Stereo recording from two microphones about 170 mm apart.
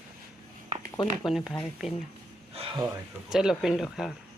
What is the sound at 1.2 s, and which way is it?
Speech, centre (ahead or behind).